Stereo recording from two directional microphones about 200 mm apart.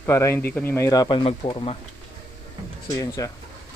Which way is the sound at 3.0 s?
15° left (ahead or behind).